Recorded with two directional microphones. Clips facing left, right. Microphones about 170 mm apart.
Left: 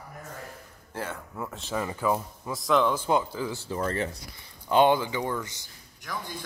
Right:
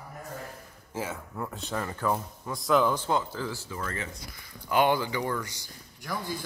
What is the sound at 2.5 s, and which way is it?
Speech, centre (ahead or behind).